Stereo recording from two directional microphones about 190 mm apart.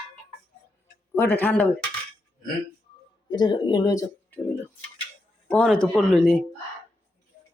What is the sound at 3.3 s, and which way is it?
Speech, 20° left (ahead or behind).